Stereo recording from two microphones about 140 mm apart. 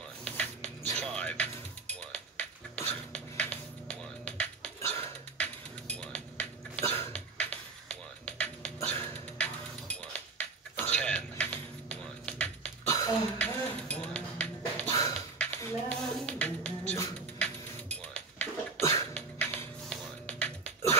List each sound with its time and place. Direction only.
0.2 s music: 10° left (ahead or behind)
5.4 s a sound: 10° left (ahead or behind)
7.1 s music: 10° left (ahead or behind)
8.8 s a sound: 10° left (ahead or behind)
17.4 s music: 10° left (ahead or behind)
18.8 s cough: 20° left (ahead or behind)
19.1 s music: 10° left (ahead or behind)